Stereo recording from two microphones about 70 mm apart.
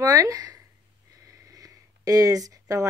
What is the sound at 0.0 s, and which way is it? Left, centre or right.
Speech, right.